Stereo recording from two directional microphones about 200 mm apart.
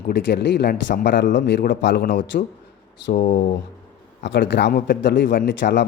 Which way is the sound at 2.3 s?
45° left (ahead or behind).